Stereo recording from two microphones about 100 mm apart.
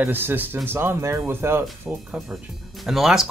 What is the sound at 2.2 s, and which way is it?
Speech, 10° right (ahead or behind).